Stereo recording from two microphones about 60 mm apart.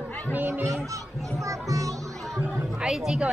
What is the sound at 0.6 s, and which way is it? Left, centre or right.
A child's voice, right.